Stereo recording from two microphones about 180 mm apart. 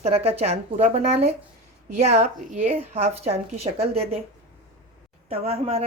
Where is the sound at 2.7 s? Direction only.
35° right (ahead or behind).